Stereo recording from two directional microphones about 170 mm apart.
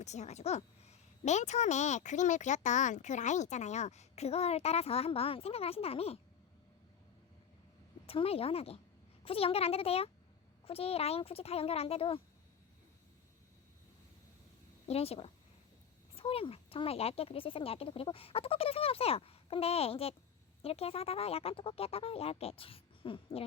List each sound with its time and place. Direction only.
0.0 s a woman's voice: 40° left (ahead or behind)
8.0 s a woman's voice: 35° left (ahead or behind)
14.8 s a woman's voice: 35° left (ahead or behind)